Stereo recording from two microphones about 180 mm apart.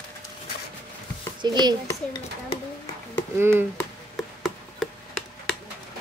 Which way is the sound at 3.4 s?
15° right (ahead or behind).